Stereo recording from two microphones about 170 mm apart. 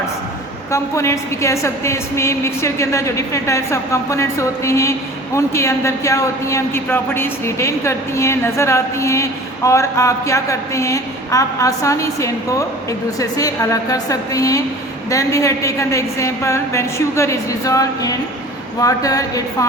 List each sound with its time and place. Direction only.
0.7 s a woman's voice: 15° left (ahead or behind)